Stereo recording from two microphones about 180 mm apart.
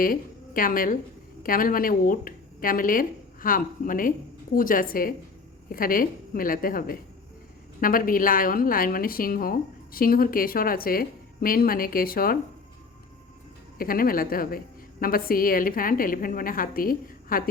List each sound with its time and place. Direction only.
0.0 s a woman's voice: 50° left (ahead or behind)
13.7 s a woman's voice: 55° left (ahead or behind)